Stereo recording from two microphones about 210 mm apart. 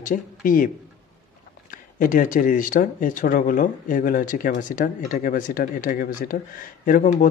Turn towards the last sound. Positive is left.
turn(degrees=40)  # may be behind; listen again after turning